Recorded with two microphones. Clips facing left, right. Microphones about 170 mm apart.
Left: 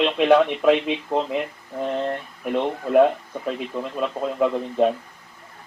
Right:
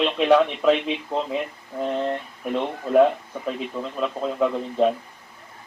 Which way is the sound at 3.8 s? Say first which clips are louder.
Left 1 dB; 10° left (ahead or behind).